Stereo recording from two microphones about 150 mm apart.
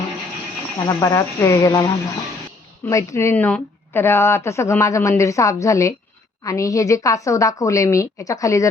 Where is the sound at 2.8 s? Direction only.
20° left (ahead or behind).